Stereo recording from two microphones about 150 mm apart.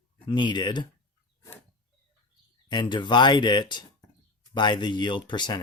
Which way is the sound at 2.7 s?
30° left (ahead or behind).